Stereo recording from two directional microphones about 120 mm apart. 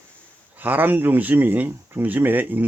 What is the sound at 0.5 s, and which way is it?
Speech, 15° right (ahead or behind).